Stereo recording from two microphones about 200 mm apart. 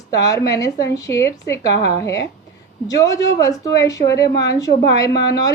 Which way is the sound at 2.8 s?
15° left (ahead or behind).